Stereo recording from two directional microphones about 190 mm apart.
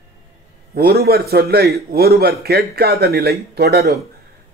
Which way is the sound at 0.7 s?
55° right (ahead or behind).